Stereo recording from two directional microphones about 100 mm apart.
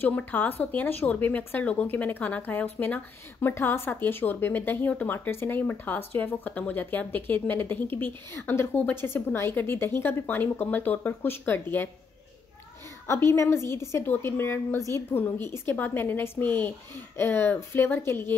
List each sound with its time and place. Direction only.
0.0 s speech: 15° left (ahead or behind)
13.0 s speech: 25° left (ahead or behind)